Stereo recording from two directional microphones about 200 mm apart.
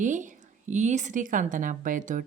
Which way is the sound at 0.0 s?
40° right (ahead or behind).